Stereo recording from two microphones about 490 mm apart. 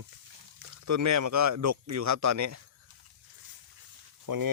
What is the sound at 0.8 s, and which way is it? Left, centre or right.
Speech, right.